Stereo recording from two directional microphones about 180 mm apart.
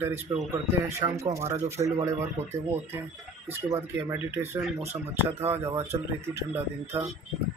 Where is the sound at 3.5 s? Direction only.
10° right (ahead or behind).